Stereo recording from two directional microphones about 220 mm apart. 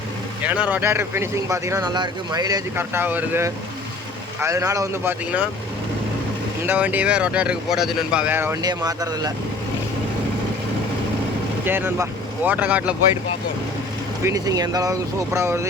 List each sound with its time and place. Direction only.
0.4 s speech: 5° right (ahead or behind)
6.7 s speech: 5° right (ahead or behind)
11.6 s speech: 10° right (ahead or behind)
14.3 s speech: 15° right (ahead or behind)